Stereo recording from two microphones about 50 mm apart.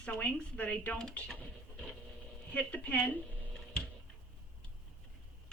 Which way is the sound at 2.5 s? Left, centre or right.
Left.